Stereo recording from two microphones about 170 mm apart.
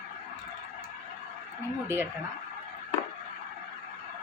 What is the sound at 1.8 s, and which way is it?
Speech, 15° right (ahead or behind).